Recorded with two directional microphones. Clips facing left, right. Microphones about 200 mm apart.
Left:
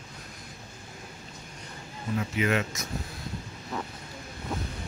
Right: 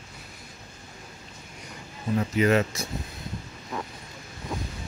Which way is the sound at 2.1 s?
35° right (ahead or behind).